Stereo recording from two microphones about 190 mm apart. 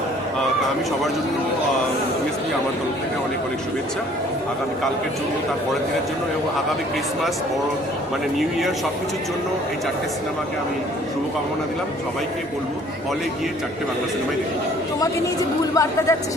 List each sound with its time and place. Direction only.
15.7 s speech: 15° left (ahead or behind)